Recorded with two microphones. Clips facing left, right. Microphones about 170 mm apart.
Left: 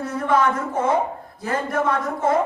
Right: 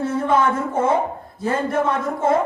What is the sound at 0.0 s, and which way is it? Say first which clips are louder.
A man's voice: right 2 dB; 25° right (ahead or behind).